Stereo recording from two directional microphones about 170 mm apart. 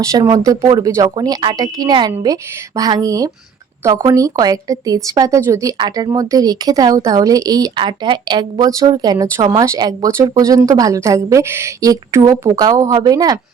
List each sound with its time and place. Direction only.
0.0 s speech: 25° right (ahead or behind)